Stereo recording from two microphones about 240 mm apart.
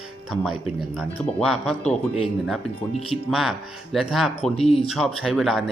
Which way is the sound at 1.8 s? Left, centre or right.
Left.